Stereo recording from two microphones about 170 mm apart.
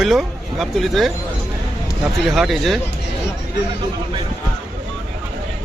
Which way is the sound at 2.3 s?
Centre (ahead or behind).